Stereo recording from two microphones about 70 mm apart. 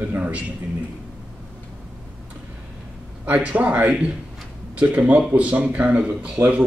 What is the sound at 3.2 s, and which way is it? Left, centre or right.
A man's voice, centre.